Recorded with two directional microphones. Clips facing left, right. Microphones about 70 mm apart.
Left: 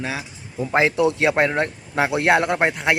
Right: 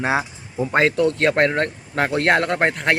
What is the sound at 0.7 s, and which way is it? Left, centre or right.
Speech, centre.